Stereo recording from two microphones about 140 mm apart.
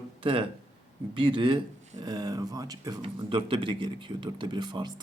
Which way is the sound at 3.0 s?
35° right (ahead or behind).